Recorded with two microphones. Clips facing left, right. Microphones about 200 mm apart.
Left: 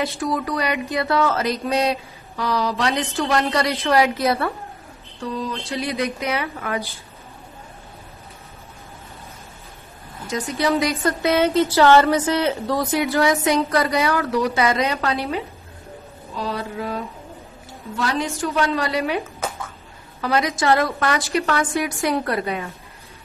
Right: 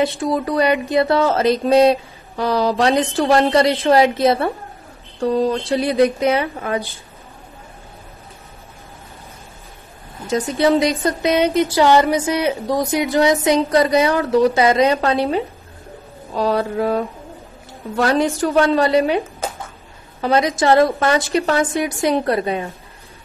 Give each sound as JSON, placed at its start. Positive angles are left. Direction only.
{"t": 0.0, "sound": "speech", "side_deg": -25}
{"t": 5.7, "sound": "speech", "side_deg": -30}
{"t": 10.2, "sound": "speech", "side_deg": -30}
{"t": 16.3, "sound": "a sound", "side_deg": -55}
{"t": 18.7, "sound": "speech", "side_deg": -25}